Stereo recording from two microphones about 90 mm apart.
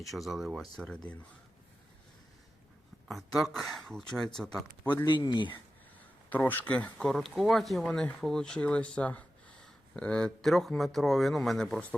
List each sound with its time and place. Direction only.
0.1 s speech: centre (ahead or behind)
0.8 s speech: 10° left (ahead or behind)
3.1 s speech: centre (ahead or behind)
5.0 s speech: 55° left (ahead or behind)
6.3 s speech: 20° left (ahead or behind)
7.1 s speech: centre (ahead or behind)